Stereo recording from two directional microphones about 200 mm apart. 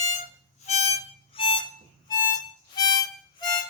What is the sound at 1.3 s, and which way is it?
Music, 25° left (ahead or behind).